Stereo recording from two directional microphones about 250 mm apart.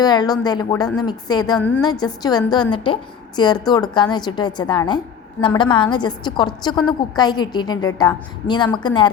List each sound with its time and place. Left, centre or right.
0.0 s a woman's voice: centre
1.5 s a woman's voice: centre